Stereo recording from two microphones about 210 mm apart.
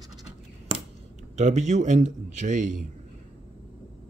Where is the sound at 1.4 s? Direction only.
35° right (ahead or behind).